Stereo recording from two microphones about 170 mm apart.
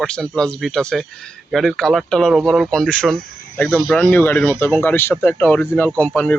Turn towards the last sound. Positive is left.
turn(degrees=5)  # may be behind; listen again after turning